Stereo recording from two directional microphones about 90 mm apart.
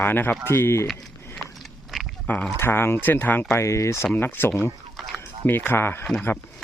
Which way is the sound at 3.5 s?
30° left (ahead or behind).